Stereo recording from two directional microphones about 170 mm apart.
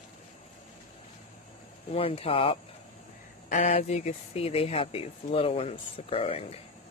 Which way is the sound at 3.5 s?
45° left (ahead or behind).